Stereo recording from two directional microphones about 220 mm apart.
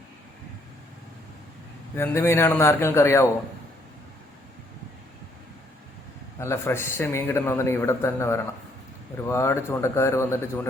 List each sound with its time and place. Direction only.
2.0 s a man's voice: 10° left (ahead or behind)
6.4 s a man's voice: 10° left (ahead or behind)